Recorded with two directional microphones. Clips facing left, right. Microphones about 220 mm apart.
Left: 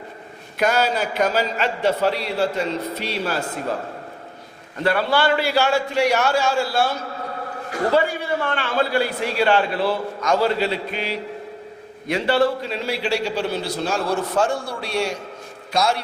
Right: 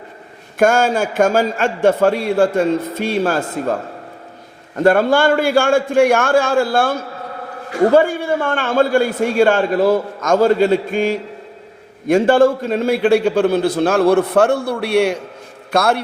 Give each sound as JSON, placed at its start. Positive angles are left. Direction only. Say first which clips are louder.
{"t": 0.6, "sound": "a man's voice", "louder": "right 6 dB", "side_deg": -50}
{"t": 4.8, "sound": "a man's voice", "louder": "right 7 dB", "side_deg": -45}